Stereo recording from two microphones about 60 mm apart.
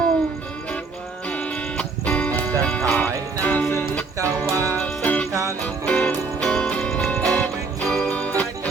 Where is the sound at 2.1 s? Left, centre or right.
Left.